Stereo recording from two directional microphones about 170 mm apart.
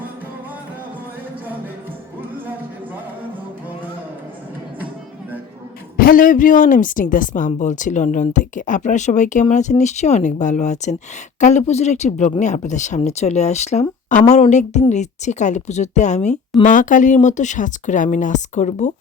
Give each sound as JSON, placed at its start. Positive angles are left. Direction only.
{"t": 6.0, "sound": "speech", "side_deg": 55}